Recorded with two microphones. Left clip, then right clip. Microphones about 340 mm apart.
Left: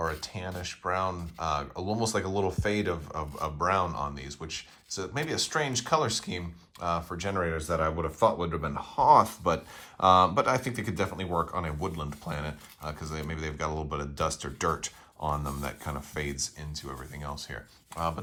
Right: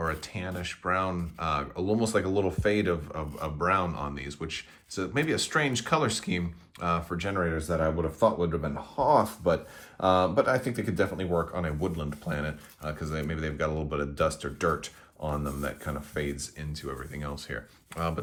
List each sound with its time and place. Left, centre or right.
0.0 s speech: centre